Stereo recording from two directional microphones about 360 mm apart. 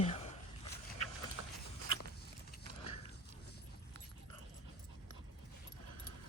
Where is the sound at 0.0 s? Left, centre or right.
Centre.